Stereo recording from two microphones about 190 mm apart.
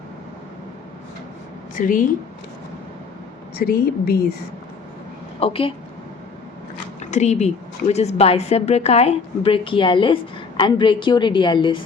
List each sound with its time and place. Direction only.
1.7 s a woman's voice: 45° left (ahead or behind)
3.6 s a woman's voice: 50° left (ahead or behind)
5.4 s a woman's voice: 30° left (ahead or behind)
7.0 s a woman's voice: 40° left (ahead or behind)